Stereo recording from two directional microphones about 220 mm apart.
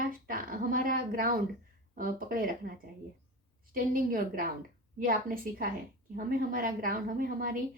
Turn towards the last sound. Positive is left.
turn(degrees=-40)  # may be behind; listen again after turning